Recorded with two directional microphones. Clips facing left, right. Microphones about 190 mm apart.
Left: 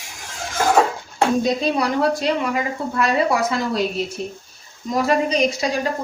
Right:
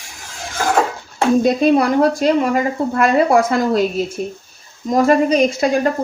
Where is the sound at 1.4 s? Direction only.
55° right (ahead or behind).